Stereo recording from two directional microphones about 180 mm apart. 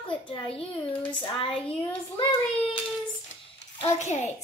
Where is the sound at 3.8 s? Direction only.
40° left (ahead or behind).